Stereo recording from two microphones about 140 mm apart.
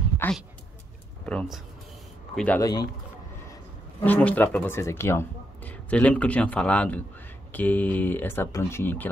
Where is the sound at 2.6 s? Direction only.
25° left (ahead or behind).